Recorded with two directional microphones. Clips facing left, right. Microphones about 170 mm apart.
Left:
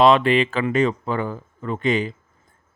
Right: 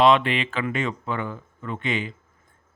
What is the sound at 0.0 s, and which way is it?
Speech, 40° left (ahead or behind).